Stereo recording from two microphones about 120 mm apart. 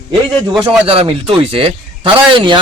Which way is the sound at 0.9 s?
50° right (ahead or behind).